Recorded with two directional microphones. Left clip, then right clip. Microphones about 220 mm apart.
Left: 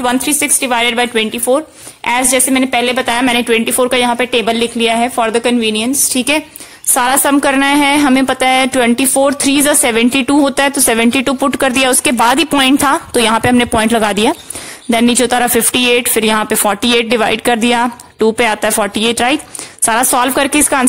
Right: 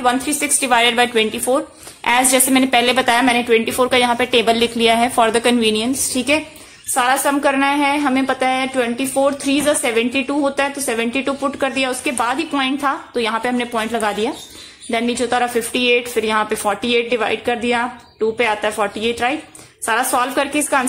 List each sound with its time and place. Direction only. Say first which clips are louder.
0.0 s a woman's voice: left 3 dB; 40° left (ahead or behind); by 5.9 s 20° left (ahead or behind)
6.1 s a woman's voice: left 3 dB; 35° left (ahead or behind)
6.9 s a woman's voice: left 4 dB; 55° left (ahead or behind)